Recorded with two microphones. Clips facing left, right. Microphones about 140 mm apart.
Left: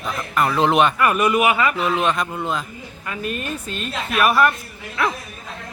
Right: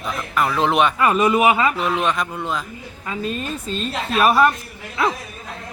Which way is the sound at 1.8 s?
Centre (ahead or behind).